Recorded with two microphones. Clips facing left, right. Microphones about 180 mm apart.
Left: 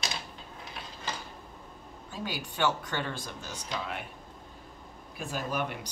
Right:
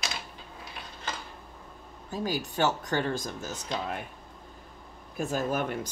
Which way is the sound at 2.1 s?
40° right (ahead or behind).